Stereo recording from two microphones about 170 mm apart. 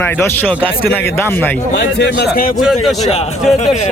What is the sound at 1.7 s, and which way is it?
Speech, 80° left.